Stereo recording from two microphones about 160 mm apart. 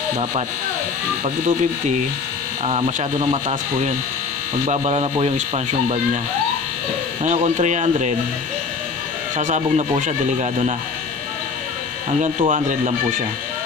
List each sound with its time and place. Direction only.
1.2 s speech: 50° right (ahead or behind)
4.6 s speech: 40° right (ahead or behind)
7.2 s speech: 45° right (ahead or behind)
9.4 s speech: 50° right (ahead or behind)
12.2 s speech: 50° right (ahead or behind)